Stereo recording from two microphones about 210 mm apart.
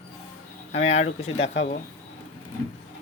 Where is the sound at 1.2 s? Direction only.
60° left (ahead or behind).